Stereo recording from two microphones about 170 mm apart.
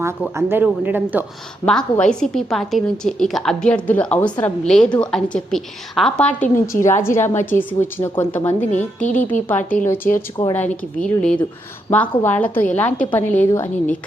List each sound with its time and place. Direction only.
0.3 s speech: 15° right (ahead or behind)
1.6 s a woman's voice: 5° left (ahead or behind)
9.0 s speech: 45° left (ahead or behind)
9.5 s a woman's voice: 10° left (ahead or behind)